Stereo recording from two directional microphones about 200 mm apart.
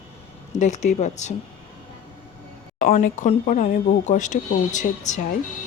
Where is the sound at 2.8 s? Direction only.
40° left (ahead or behind).